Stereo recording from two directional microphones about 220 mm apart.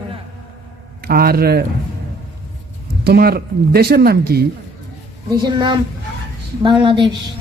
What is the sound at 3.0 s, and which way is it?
Speech, 45° right (ahead or behind).